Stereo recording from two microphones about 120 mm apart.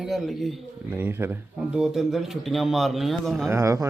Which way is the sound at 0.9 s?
15° right (ahead or behind).